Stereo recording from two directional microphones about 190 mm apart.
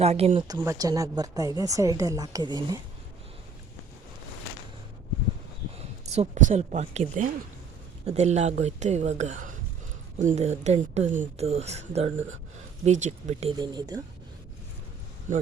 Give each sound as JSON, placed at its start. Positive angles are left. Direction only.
{"t": 0.0, "sound": "speech", "side_deg": -35}
{"t": 0.4, "sound": "speech", "side_deg": -15}
{"t": 5.7, "sound": "speech", "side_deg": -35}
{"t": 13.6, "sound": "speech", "side_deg": -20}